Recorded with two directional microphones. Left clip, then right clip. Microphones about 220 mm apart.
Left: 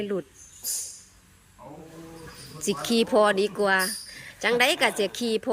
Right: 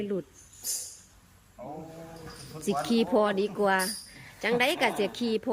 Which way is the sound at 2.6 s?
10° right (ahead or behind).